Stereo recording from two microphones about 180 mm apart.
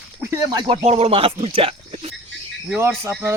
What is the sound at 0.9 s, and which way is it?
Speech, 35° right (ahead or behind).